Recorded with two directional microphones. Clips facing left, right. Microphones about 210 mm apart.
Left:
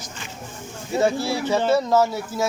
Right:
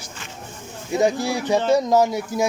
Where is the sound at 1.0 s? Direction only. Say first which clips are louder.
Right 1 dB; 15° right (ahead or behind).